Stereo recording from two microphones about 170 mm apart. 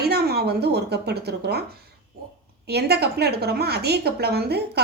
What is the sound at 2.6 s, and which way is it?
A woman's voice, 70° right (ahead or behind).